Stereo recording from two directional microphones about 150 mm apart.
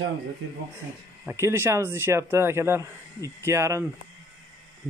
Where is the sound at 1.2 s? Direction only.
15° right (ahead or behind).